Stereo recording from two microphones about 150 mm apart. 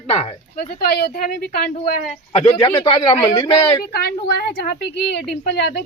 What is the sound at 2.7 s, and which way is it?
Speech, 40° left (ahead or behind).